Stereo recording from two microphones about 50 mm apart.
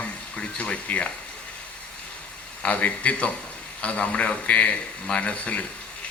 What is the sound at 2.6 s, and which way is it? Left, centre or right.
A man's voice, left.